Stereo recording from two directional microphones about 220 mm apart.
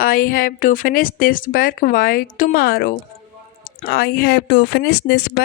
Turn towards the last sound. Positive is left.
turn(degrees=45)  # may be behind; listen again after turning